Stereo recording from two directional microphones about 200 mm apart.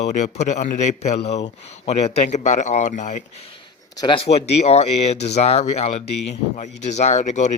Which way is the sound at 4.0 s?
25° left (ahead or behind).